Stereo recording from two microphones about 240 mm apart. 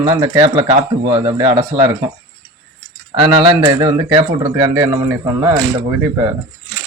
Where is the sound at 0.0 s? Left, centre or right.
Centre.